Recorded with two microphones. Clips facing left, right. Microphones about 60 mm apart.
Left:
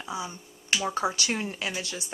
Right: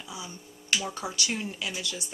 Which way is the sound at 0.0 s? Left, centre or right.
Left.